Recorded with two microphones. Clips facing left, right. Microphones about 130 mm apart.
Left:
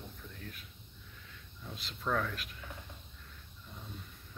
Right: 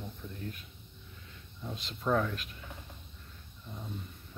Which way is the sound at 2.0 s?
20° right (ahead or behind).